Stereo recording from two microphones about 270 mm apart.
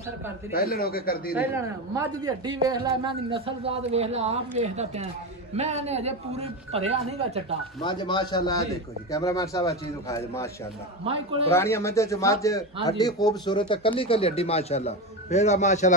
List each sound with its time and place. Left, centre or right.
0.5 s speech: left
1.3 s speech: centre
7.8 s a man's voice: centre
11.5 s a man's voice: centre; by 15.9 s left